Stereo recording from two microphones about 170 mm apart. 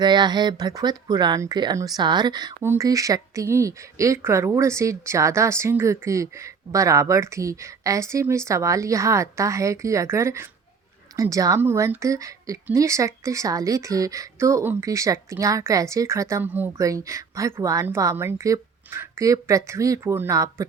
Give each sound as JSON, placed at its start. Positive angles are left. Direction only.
{"t": 0.0, "sound": "a woman's voice", "side_deg": -25}